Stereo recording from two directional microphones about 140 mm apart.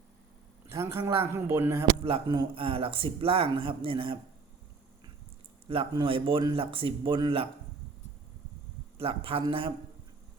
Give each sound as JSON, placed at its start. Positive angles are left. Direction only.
{"t": 0.7, "sound": "speech", "side_deg": -20}
{"t": 2.0, "sound": "speech", "side_deg": -35}
{"t": 5.6, "sound": "speech", "side_deg": -40}
{"t": 9.0, "sound": "speech", "side_deg": -40}